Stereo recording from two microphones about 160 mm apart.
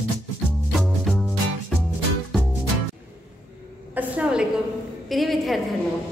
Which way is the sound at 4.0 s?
5° right (ahead or behind).